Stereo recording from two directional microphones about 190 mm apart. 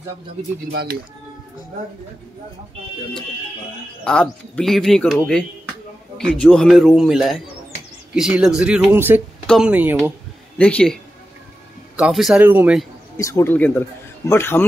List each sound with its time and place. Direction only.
0.7 s speech: 55° right (ahead or behind)
4.0 s speech: 5° left (ahead or behind)
10.6 s speech: 5° left (ahead or behind)
12.0 s speech: centre (ahead or behind)
13.2 s speech: 15° left (ahead or behind)